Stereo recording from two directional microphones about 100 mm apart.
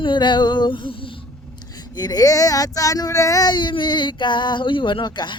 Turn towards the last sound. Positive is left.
turn(degrees=50)  # may be behind; listen again after turning